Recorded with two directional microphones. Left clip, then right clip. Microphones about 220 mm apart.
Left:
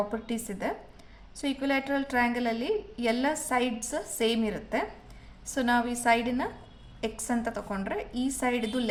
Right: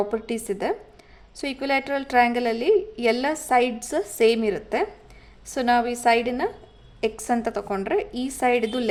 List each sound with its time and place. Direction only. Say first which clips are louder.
0.1 s a woman's voice: right 8 dB; 35° right (ahead or behind)